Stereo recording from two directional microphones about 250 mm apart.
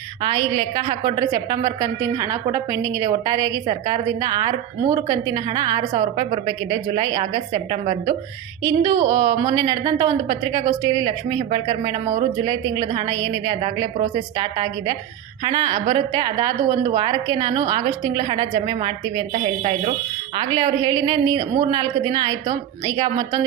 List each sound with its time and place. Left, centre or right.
0.2 s a woman's voice: centre